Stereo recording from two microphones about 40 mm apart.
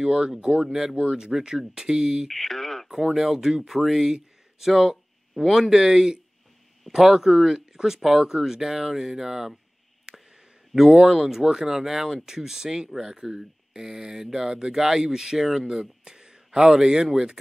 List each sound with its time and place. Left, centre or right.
0.0 s speech: right
0.6 s speech: centre
0.9 s speech: right
2.2 s a sound: centre
2.9 s speech: centre
10.1 s a sound: centre
10.9 s speech: centre
15.6 s speech: centre